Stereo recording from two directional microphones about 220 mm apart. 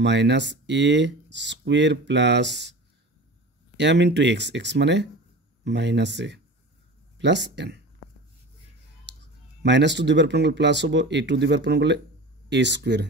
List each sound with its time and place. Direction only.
0.0 s speech: 50° right (ahead or behind)
3.7 s speech: 55° right (ahead or behind)
9.0 s speech: 50° right (ahead or behind)